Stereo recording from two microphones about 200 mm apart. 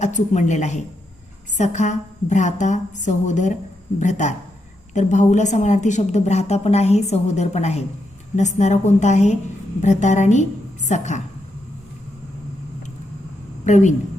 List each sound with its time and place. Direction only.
0.0 s a woman's voice: 35° left (ahead or behind)
13.7 s a woman's voice: 40° left (ahead or behind)